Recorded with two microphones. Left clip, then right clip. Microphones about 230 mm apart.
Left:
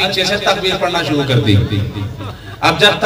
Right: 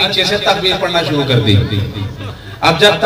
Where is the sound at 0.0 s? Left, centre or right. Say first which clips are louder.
Right 2 dB; left.